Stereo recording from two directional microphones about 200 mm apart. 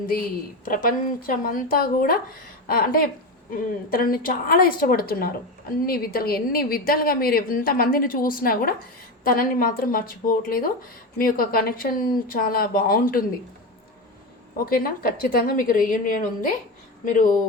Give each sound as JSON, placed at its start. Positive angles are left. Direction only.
{"t": 0.1, "sound": "a woman's voice", "side_deg": 45}
{"t": 14.6, "sound": "a woman's voice", "side_deg": 50}